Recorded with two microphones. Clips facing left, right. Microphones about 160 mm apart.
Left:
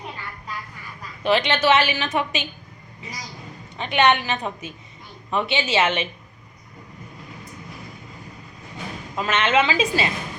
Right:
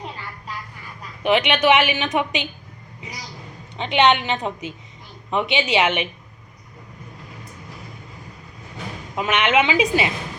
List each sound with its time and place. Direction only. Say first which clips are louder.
1.2 s a woman's voice: right 2 dB; 15° right (ahead or behind)
3.8 s a woman's voice: right 2 dB; 20° right (ahead or behind)
9.1 s a woman's voice: right 1 dB; 15° right (ahead or behind)